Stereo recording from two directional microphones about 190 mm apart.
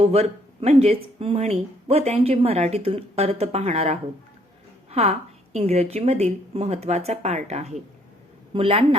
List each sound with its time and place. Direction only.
0.0 s a woman's voice: 30° right (ahead or behind)